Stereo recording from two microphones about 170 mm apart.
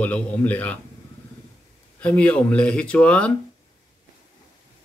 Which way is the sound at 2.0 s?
5° left (ahead or behind).